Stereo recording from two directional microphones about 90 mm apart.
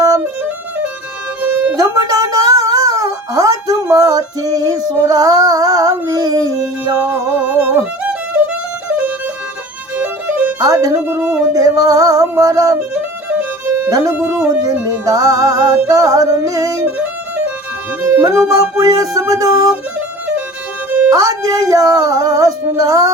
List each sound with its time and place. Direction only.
1.4 s music: 15° right (ahead or behind)
1.7 s music: 40° right (ahead or behind)
7.0 s music: 15° right (ahead or behind)
8.9 s music: 15° right (ahead or behind)
10.6 s speech: 40° right (ahead or behind)
11.5 s music: 40° right (ahead or behind)
12.9 s music: 15° right (ahead or behind)
13.9 s music: 40° right (ahead or behind)
16.8 s music: 15° right (ahead or behind)
18.2 s music: 40° right (ahead or behind)
21.1 s music: 40° right (ahead or behind)